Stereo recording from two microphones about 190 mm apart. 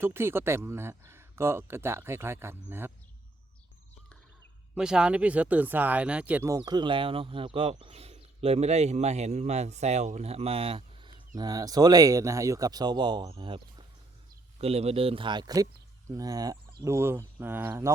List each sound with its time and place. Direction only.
0.0 s speech: 10° right (ahead or behind)
4.7 s speech: 5° right (ahead or behind)
6.5 s speech: 20° right (ahead or behind)